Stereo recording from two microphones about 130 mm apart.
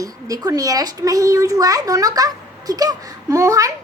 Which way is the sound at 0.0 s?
30° right (ahead or behind).